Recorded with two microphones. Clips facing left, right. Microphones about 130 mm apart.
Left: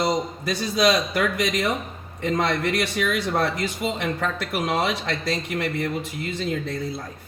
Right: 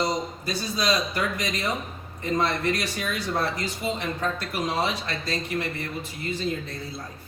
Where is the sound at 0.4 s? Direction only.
70° left (ahead or behind).